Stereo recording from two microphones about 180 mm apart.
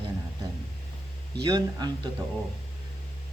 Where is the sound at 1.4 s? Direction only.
25° right (ahead or behind).